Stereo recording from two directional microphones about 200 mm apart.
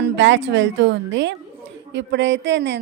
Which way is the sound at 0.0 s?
65° right (ahead or behind).